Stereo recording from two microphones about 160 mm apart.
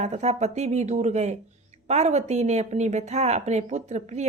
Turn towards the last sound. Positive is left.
turn(degrees=-45)  # may be behind; listen again after turning